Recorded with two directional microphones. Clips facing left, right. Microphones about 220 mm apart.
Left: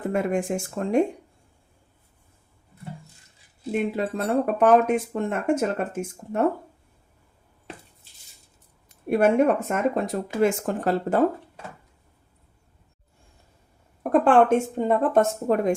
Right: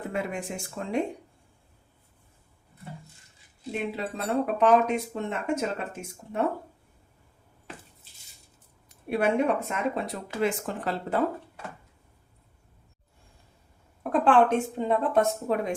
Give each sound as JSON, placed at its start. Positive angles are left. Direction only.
{"t": 0.1, "sound": "speech", "side_deg": 50}
{"t": 4.0, "sound": "speech", "side_deg": 50}
{"t": 9.0, "sound": "speech", "side_deg": 45}
{"t": 14.0, "sound": "speech", "side_deg": 45}